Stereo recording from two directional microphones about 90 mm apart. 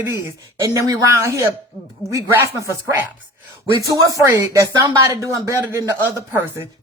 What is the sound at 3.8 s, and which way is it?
Speech, 40° right (ahead or behind).